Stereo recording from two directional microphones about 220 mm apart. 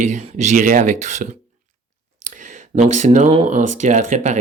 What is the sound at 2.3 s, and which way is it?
Speech, 35° right (ahead or behind).